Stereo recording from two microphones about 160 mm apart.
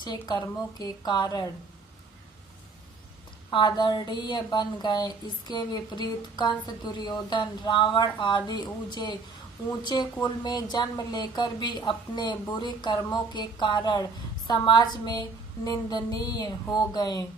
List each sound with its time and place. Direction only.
0.0 s speech: 25° left (ahead or behind)
3.5 s speech: 30° left (ahead or behind)